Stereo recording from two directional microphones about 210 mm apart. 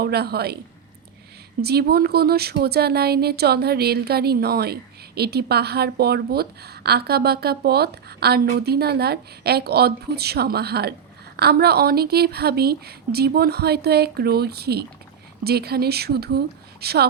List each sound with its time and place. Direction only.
0.0 s speech: 50° right (ahead or behind)
1.6 s speech: 50° right (ahead or behind)